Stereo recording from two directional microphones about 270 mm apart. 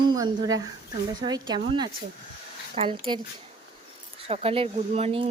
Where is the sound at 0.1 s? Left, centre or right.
Centre.